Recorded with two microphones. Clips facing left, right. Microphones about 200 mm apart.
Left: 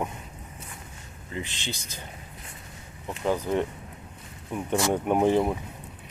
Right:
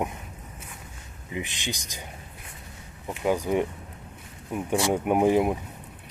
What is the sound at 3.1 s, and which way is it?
Speech, 15° right (ahead or behind).